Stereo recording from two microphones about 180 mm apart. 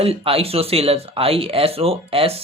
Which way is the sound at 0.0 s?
30° right (ahead or behind).